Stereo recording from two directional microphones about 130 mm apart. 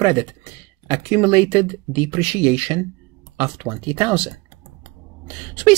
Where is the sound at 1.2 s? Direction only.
45° right (ahead or behind).